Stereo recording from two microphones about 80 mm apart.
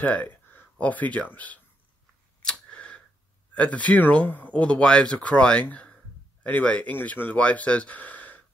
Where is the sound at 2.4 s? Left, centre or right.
Centre.